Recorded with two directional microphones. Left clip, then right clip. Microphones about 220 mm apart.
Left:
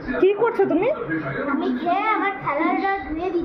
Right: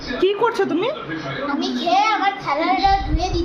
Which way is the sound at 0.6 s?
15° right (ahead or behind).